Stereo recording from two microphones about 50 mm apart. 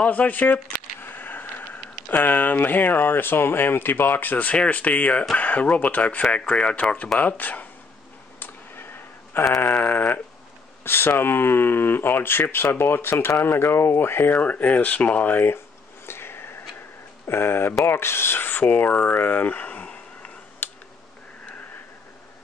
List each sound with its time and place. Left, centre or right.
0.0 s speech: left
6.3 s speech: left
9.6 s speech: left
10.8 s speech: left
14.3 s speech: left
16.1 s a sound: left
17.3 s speech: left
18.9 s a sound: left